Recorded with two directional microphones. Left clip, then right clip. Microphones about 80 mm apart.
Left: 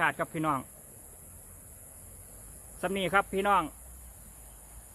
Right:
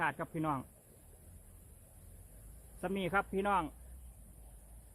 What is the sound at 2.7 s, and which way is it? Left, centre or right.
Speech, centre.